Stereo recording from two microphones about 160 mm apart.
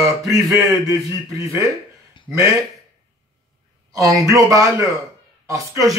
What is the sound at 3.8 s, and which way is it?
Speech, 20° right (ahead or behind).